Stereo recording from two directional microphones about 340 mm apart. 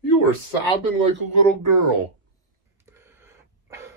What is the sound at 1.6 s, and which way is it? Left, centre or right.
Speech, right.